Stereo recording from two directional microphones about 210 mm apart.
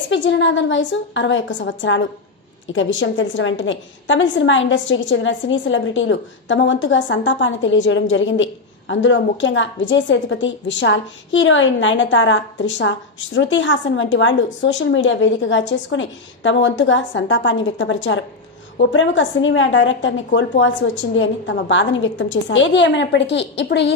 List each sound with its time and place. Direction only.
0.1 s a woman's voice: 60° left (ahead or behind)